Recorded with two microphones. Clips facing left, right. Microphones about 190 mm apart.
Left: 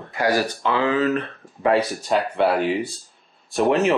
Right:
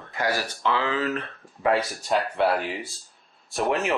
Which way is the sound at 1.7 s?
Centre (ahead or behind).